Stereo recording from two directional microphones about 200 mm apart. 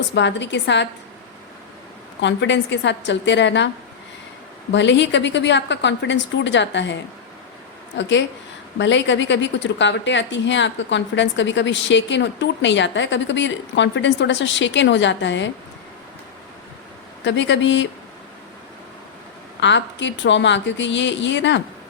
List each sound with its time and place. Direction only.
0.1 s speech: 65° left (ahead or behind)
2.2 s speech: 65° left (ahead or behind)
4.7 s speech: 65° left (ahead or behind)
8.8 s speech: 65° left (ahead or behind)
17.2 s speech: 65° left (ahead or behind)
19.5 s speech: 65° left (ahead or behind)